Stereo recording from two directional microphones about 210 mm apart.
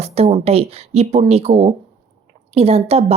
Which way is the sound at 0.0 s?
30° right (ahead or behind).